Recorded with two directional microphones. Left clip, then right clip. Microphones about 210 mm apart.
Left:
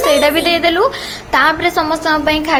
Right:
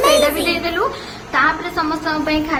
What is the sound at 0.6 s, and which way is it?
A woman's voice, 35° left (ahead or behind).